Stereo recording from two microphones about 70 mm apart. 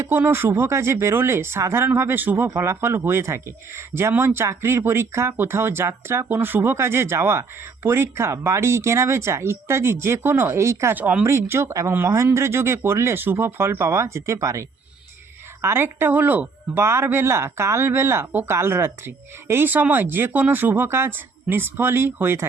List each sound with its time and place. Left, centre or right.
0.0 s speech: right
2.5 s speech: right
10.9 s speech: right
11.3 s speech: right
15.6 s speech: right